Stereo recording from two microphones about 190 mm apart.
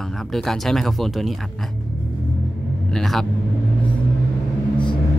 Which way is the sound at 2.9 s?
Centre (ahead or behind).